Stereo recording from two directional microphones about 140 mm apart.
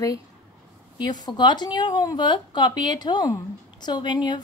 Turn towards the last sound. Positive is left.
turn(degrees=30)  # may be behind; listen again after turning